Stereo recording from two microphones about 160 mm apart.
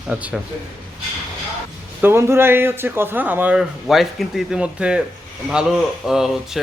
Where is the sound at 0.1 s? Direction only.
10° right (ahead or behind).